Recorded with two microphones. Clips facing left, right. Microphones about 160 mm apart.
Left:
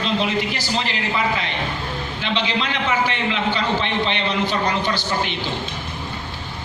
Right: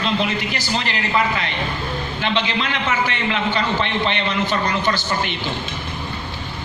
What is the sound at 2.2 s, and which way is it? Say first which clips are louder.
A man's voice: right 1 dB; 55° right (ahead or behind).